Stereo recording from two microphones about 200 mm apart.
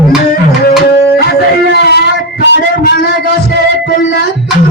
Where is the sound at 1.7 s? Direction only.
55° left (ahead or behind).